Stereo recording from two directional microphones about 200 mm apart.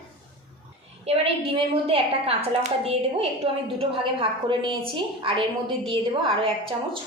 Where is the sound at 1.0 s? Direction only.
30° right (ahead or behind).